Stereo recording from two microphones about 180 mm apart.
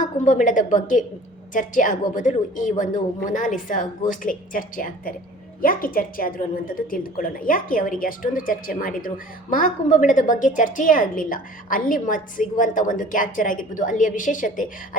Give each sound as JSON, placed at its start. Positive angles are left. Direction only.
{"t": 0.0, "sound": "a woman's voice", "side_deg": 45}